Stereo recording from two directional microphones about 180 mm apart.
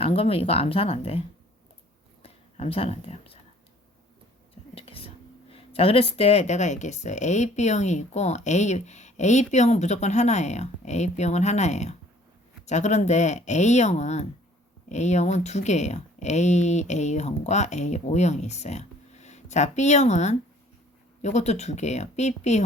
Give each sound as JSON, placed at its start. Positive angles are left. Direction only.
{"t": 0.0, "sound": "speech", "side_deg": 35}
{"t": 2.2, "sound": "speech", "side_deg": 35}
{"t": 4.7, "sound": "speech", "side_deg": 30}